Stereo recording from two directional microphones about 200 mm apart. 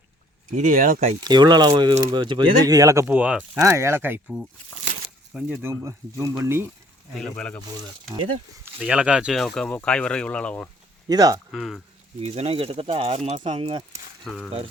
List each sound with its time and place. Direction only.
0.5 s speech: 40° right (ahead or behind)
1.2 s speech: 20° right (ahead or behind)
5.3 s speech: 5° right (ahead or behind)
7.2 s speech: 5° left (ahead or behind)
8.8 s speech: 5° right (ahead or behind)
11.1 s speech: 20° right (ahead or behind)
11.5 s speech: centre (ahead or behind)
12.2 s speech: 30° right (ahead or behind)
14.3 s speech: centre (ahead or behind)